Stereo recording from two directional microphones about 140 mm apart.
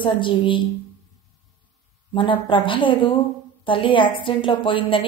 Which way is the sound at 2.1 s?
35° left (ahead or behind).